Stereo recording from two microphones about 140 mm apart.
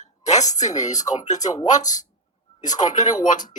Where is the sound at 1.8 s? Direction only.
60° left (ahead or behind).